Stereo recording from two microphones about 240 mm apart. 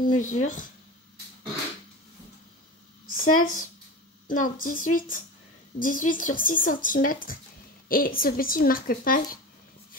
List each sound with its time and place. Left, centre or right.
0.1 s speech: left
3.2 s speech: left